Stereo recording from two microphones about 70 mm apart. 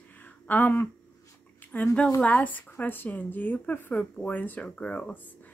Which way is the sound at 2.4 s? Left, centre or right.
Left.